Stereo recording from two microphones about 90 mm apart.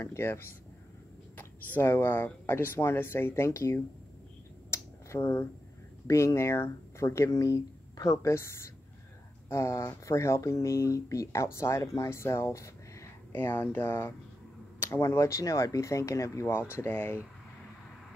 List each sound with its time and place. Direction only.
0.0 s speech: 30° left (ahead or behind)
1.8 s speech: 25° left (ahead or behind)
4.6 s finger snapping: 30° left (ahead or behind)
6.0 s speech: 30° left (ahead or behind)